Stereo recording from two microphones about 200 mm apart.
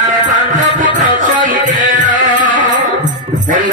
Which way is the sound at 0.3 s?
40° right (ahead or behind).